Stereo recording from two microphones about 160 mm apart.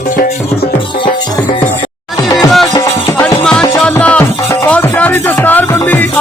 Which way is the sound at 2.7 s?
15° left (ahead or behind).